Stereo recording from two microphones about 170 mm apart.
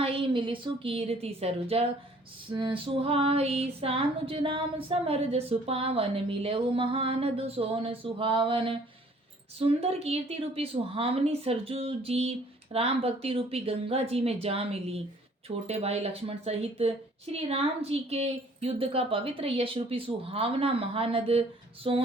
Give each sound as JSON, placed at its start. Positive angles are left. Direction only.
{"t": 0.0, "sound": "female singing", "side_deg": -30}